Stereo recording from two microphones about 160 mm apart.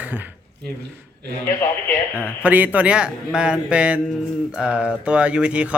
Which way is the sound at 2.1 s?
10° right (ahead or behind).